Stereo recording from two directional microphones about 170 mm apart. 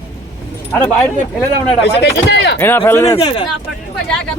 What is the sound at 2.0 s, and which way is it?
Speech, 80° left.